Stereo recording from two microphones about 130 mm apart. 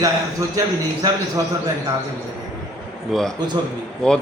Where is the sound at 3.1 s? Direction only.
Centre (ahead or behind).